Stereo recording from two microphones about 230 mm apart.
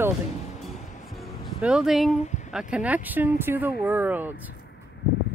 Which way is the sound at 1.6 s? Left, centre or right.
Centre.